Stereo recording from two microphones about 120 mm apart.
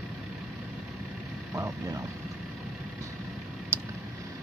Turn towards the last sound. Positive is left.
turn(degrees=-20)  # may be behind; listen again after turning